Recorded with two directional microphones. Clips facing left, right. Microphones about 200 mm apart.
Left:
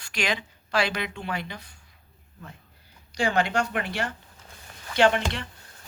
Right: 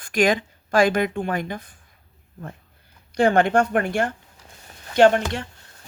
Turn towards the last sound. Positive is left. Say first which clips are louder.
# right 6 dB
turn(degrees=-45)  # may be behind; listen again after turning